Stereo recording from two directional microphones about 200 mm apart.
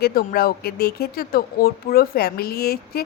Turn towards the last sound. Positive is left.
turn(degrees=50)  # may be behind; listen again after turning